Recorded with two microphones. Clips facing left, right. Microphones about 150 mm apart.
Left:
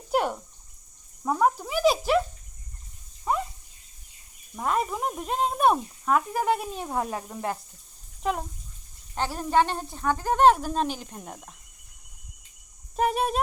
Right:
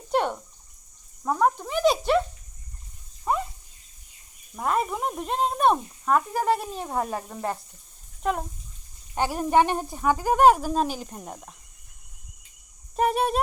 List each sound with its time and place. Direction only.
0.1 s a sound: 5° left (ahead or behind)
1.2 s speech: 5° left (ahead or behind)
3.3 s a sound: centre (ahead or behind)
4.5 s speech: centre (ahead or behind)
9.1 s speech: 15° right (ahead or behind)
13.0 s speech: centre (ahead or behind)